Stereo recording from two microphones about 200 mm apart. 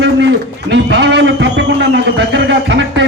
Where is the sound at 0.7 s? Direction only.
60° right (ahead or behind).